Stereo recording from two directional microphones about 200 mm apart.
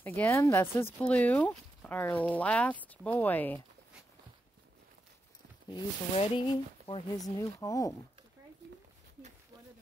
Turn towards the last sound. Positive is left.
turn(degrees=15)  # may be behind; listen again after turning